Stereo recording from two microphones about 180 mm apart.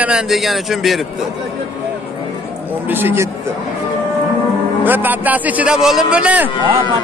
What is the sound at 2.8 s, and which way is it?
Speech, 10° right (ahead or behind).